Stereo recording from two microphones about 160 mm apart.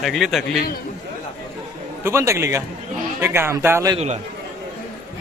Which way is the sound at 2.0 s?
15° right (ahead or behind).